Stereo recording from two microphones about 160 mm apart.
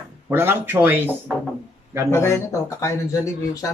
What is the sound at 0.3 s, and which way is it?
Speech, 15° right (ahead or behind).